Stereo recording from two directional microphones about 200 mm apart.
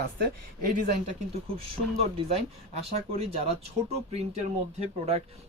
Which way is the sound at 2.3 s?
30° right (ahead or behind).